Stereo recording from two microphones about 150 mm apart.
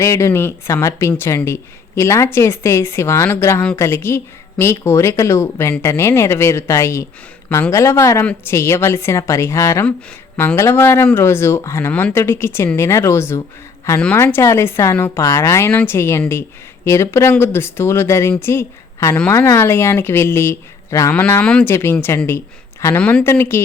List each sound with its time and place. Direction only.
0.0 s a woman's voice: 20° left (ahead or behind)